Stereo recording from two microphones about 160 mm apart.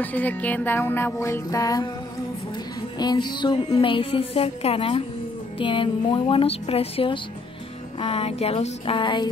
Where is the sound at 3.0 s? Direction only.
25° left (ahead or behind).